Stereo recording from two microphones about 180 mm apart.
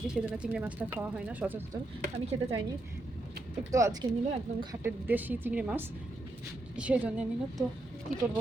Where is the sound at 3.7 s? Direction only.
20° right (ahead or behind).